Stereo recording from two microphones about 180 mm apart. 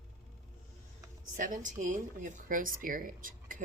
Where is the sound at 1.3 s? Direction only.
45° right (ahead or behind).